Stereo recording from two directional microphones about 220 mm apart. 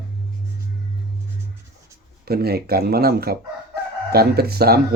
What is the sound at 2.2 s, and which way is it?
Speech, 45° right (ahead or behind).